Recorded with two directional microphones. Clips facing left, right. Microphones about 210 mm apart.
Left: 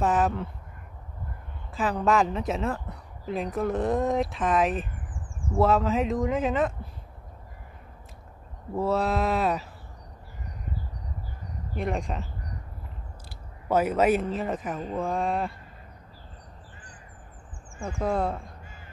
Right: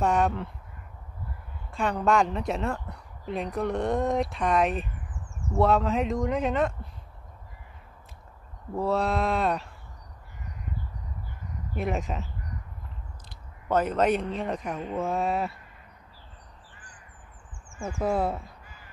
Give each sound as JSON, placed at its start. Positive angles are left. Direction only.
{"t": 0.0, "sound": "speech", "side_deg": 0}
{"t": 1.7, "sound": "speech", "side_deg": 0}
{"t": 4.9, "sound": "a sound", "side_deg": 50}
{"t": 5.6, "sound": "speech", "side_deg": 0}
{"t": 8.7, "sound": "speech", "side_deg": 0}
{"t": 11.7, "sound": "speech", "side_deg": 0}
{"t": 13.7, "sound": "speech", "side_deg": 10}
{"t": 18.0, "sound": "speech", "side_deg": -5}